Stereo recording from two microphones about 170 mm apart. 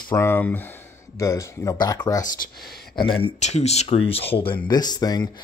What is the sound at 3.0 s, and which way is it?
Speech, 30° left (ahead or behind).